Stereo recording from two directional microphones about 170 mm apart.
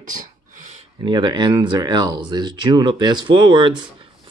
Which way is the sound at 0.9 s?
25° right (ahead or behind).